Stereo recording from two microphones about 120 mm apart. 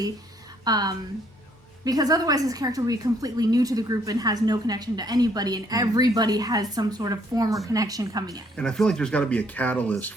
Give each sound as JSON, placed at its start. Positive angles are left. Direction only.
{"t": 0.6, "sound": "a woman's voice", "side_deg": -35}
{"t": 8.5, "sound": "speech", "side_deg": 5}